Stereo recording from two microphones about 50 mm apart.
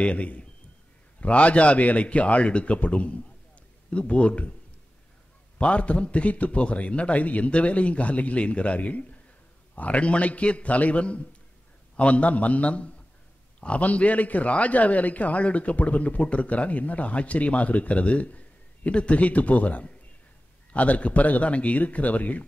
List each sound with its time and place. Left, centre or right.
0.0 s a man's voice: left
5.6 s a man's voice: left